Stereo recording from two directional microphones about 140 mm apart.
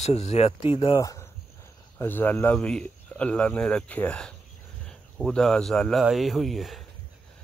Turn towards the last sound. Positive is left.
turn(degrees=0)  # may be behind; listen again after turning